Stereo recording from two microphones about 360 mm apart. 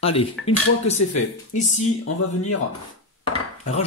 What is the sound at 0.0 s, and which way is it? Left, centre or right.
Speech, centre.